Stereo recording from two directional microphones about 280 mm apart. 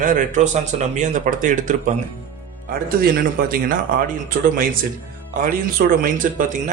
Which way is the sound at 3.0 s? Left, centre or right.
Right.